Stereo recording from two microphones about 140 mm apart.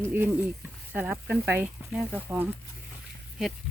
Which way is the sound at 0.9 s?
10° right (ahead or behind).